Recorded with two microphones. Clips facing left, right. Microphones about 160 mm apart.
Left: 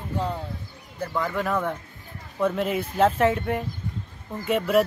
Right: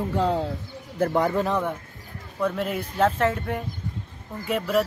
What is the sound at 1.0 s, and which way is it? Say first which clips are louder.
Speech: right 5 dB; 40° right (ahead or behind).